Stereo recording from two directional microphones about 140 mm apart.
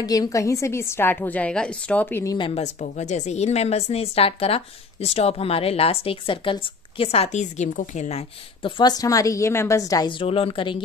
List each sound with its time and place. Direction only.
0.0 s a woman's voice: 25° left (ahead or behind)
2.3 s a woman's voice: 35° left (ahead or behind)
2.6 s a woman's voice: 55° left (ahead or behind); by 10.8 s 40° left (ahead or behind)